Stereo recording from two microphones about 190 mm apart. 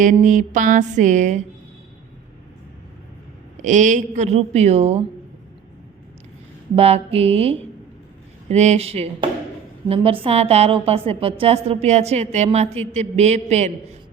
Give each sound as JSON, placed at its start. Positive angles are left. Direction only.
{"t": 0.0, "sound": "a woman's voice", "side_deg": -45}
{"t": 3.6, "sound": "a woman's voice", "side_deg": -40}
{"t": 6.7, "sound": "a woman's voice", "side_deg": -30}